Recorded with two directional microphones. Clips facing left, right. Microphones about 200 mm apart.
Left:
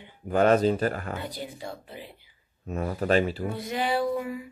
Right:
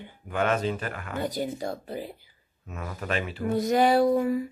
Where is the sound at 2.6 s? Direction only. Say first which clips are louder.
Left 7 dB; 35° left (ahead or behind).